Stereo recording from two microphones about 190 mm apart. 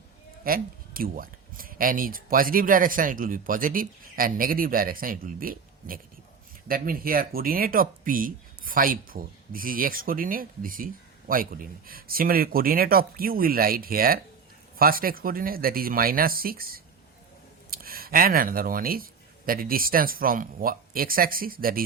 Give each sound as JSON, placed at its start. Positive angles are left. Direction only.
{"t": 0.4, "sound": "speech", "side_deg": -50}